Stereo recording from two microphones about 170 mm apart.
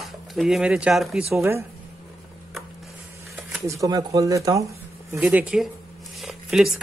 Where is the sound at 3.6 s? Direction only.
20° right (ahead or behind).